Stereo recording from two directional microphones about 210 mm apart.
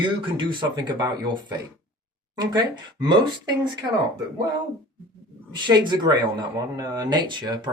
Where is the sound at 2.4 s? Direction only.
20° right (ahead or behind).